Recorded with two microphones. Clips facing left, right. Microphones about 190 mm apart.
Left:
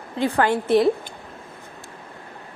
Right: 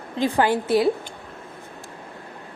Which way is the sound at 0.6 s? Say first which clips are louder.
Left 2 dB; centre (ahead or behind).